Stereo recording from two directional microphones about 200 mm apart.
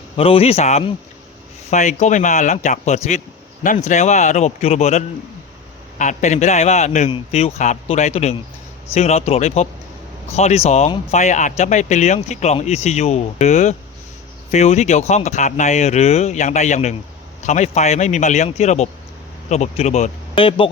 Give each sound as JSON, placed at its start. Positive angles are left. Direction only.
{"t": 0.2, "sound": "speech", "side_deg": 30}